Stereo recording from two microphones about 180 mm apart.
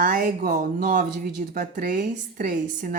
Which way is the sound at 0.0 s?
50° right (ahead or behind).